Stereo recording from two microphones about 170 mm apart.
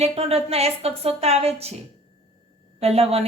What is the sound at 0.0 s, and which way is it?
A woman's voice, 35° right (ahead or behind).